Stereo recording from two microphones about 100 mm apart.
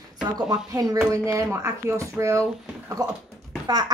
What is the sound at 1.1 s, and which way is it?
Speech, 30° right (ahead or behind).